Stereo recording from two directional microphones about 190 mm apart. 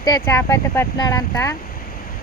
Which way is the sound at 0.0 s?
15° left (ahead or behind).